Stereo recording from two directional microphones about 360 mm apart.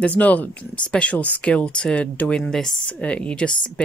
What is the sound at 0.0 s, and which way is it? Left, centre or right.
Speech, centre.